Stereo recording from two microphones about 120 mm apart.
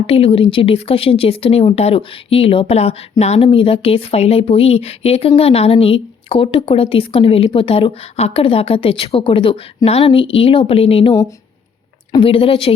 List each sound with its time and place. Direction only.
0.1 s a woman's voice: 50° left (ahead or behind)
12.1 s a woman's voice: 45° left (ahead or behind)